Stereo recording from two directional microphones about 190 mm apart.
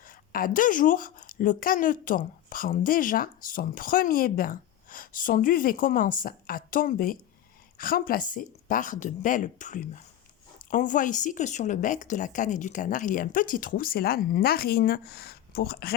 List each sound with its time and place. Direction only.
0.0 s a woman's voice: 45° left (ahead or behind)